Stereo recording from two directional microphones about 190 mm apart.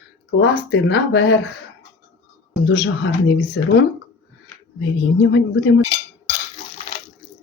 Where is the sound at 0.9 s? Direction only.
75° left (ahead or behind).